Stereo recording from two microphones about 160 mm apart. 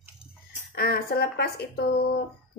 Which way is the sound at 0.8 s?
75° left (ahead or behind).